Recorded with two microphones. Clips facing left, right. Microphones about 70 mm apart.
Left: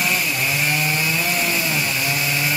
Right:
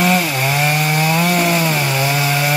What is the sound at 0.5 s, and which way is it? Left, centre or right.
Chainsaw, right.